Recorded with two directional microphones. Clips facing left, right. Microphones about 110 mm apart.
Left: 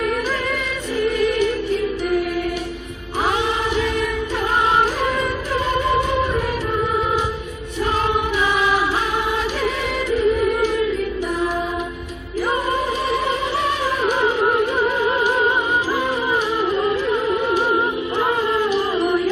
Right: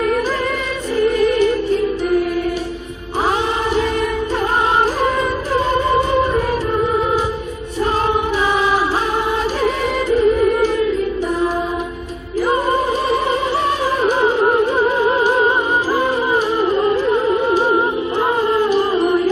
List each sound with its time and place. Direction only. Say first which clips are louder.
0.9 s music: right 4 dB; 40° right (ahead or behind)
5.5 s music: right 3 dB; 35° right (ahead or behind)
9.6 s music: right 4 dB; 40° right (ahead or behind)
14.0 s music: right 4 dB; 35° right (ahead or behind)